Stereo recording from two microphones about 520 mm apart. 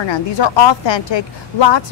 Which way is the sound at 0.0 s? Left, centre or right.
Left.